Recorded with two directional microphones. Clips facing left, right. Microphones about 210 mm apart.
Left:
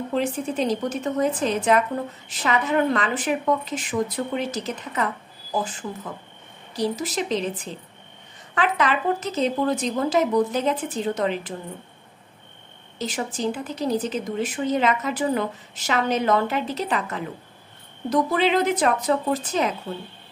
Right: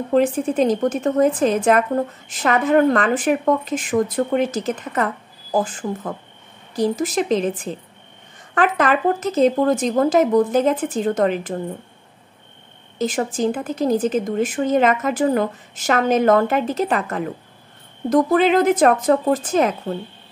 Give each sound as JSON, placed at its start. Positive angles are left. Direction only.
{"t": 0.1, "sound": "a woman's voice", "side_deg": -50}
{"t": 13.0, "sound": "a woman's voice", "side_deg": -50}